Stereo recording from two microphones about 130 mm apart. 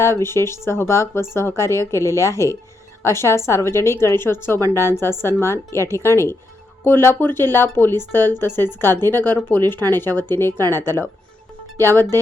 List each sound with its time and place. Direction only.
0.0 s a woman's voice: 20° left (ahead or behind)